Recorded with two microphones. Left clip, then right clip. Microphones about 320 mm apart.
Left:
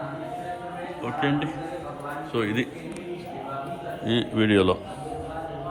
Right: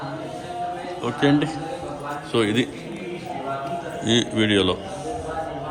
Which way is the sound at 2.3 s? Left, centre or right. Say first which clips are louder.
Right 6 dB; centre.